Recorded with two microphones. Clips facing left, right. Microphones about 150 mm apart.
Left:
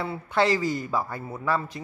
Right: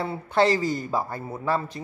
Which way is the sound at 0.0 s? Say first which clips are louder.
Right 2 dB; 30° right (ahead or behind).